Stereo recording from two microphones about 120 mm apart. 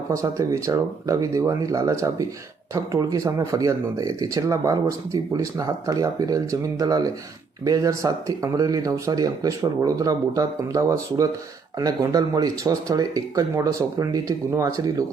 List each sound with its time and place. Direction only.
0.1 s speech: 25° right (ahead or behind)